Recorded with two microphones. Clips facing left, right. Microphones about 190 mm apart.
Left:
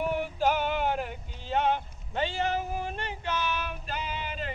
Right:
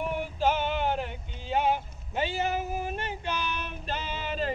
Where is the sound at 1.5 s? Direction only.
5° right (ahead or behind).